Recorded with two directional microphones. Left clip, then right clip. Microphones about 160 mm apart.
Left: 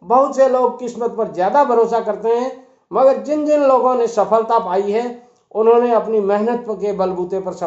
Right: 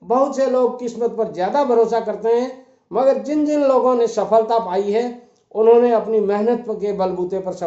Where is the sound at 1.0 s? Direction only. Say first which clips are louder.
Left 2 dB; centre (ahead or behind).